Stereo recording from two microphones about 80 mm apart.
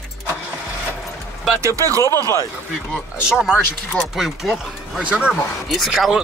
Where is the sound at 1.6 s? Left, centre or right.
Right.